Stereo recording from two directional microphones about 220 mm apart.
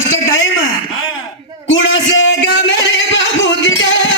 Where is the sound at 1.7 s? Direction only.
55° left (ahead or behind).